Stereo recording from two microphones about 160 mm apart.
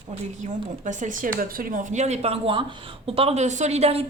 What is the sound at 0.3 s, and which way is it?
Speech, 50° right (ahead or behind).